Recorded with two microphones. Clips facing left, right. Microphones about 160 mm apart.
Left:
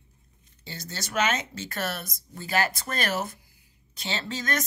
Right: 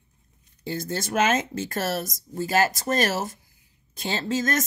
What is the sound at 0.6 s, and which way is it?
Speech, 50° right (ahead or behind).